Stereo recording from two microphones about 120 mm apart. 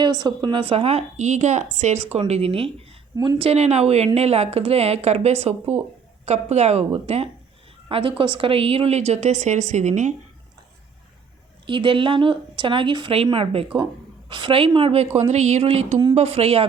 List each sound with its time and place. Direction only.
0.0 s a woman's voice: 40° right (ahead or behind); by 10.2 s 80° right
11.6 s a woman's voice: 45° right (ahead or behind)